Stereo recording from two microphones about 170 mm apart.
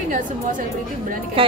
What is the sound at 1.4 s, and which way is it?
Speech, 30° right (ahead or behind).